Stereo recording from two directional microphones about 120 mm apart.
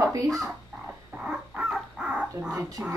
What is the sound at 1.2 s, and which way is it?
Dog, centre (ahead or behind).